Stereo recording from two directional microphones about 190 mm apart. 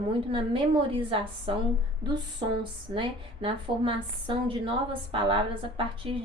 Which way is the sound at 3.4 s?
25° right (ahead or behind).